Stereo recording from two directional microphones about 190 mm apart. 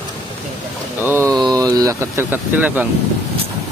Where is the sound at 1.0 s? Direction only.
15° right (ahead or behind).